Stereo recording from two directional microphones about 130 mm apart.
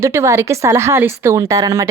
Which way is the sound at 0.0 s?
20° right (ahead or behind).